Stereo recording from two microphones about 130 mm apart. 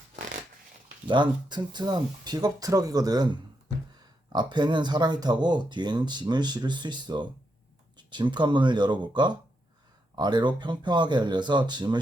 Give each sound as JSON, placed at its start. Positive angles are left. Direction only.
{"t": 1.0, "sound": "speech", "side_deg": -35}
{"t": 4.3, "sound": "speech", "side_deg": -35}